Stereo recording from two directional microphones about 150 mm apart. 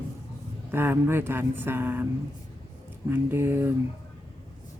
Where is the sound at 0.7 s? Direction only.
15° right (ahead or behind).